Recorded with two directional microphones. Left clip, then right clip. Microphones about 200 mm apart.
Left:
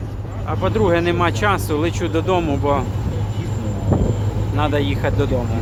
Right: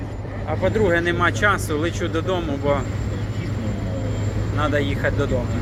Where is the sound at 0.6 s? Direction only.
20° left (ahead or behind).